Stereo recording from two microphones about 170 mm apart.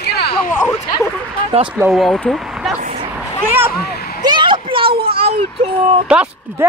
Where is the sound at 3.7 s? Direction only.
60° left (ahead or behind).